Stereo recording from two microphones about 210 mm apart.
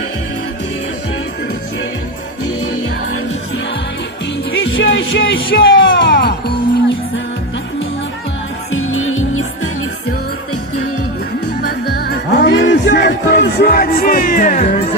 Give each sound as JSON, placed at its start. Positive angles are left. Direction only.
{"t": 2.6, "sound": "music", "side_deg": 90}
{"t": 4.6, "sound": "music", "side_deg": 55}
{"t": 8.7, "sound": "music", "side_deg": 75}
{"t": 11.6, "sound": "music", "side_deg": 50}